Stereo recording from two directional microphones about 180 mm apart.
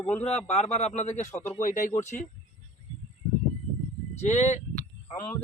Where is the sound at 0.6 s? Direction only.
40° left (ahead or behind).